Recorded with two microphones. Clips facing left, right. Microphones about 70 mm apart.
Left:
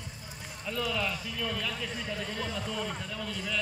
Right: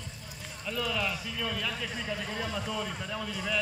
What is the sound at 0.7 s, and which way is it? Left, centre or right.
A man's voice, centre.